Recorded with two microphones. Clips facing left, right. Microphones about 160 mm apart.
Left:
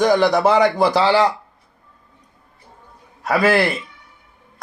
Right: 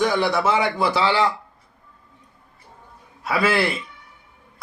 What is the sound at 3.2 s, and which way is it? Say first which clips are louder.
Speech: left 4 dB; 45° left (ahead or behind).